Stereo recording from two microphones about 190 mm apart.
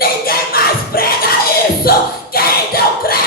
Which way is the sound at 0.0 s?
50° left (ahead or behind).